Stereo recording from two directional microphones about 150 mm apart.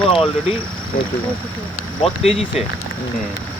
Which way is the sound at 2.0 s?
40° left (ahead or behind).